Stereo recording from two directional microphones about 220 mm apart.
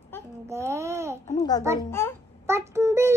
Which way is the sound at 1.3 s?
15° left (ahead or behind).